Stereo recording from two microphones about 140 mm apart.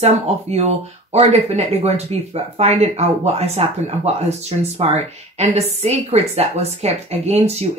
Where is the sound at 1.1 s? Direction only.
50° right (ahead or behind).